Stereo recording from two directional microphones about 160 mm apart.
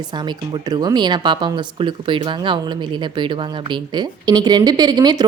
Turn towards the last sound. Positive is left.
turn(degrees=-25)  # may be behind; listen again after turning